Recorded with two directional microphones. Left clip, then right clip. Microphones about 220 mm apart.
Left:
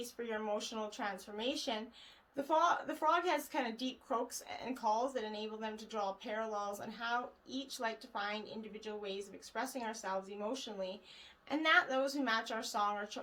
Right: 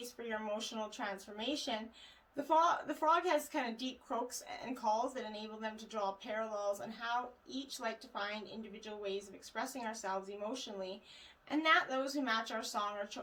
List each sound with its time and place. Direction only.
0.0 s a woman's voice: 30° left (ahead or behind)